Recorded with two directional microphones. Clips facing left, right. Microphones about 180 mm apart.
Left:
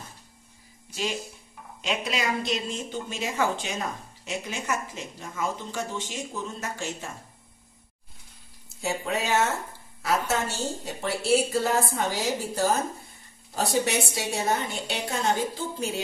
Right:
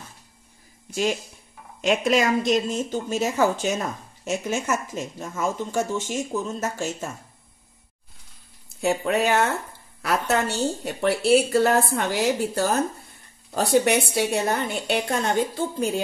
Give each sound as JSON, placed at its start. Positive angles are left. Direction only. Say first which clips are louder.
{"t": 1.8, "sound": "a woman's voice", "louder": "right 9 dB", "side_deg": -50}
{"t": 8.8, "sound": "a woman's voice", "louder": "right 7 dB", "side_deg": -60}